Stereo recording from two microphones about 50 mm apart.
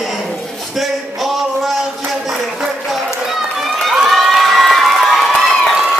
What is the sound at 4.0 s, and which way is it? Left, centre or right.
Crowd, centre.